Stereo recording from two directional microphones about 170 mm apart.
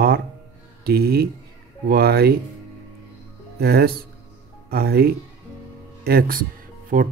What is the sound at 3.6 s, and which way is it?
Speech, 65° right (ahead or behind).